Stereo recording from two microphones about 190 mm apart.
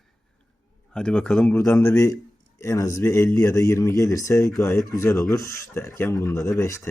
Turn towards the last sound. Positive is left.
turn(degrees=15)  # may be behind; listen again after turning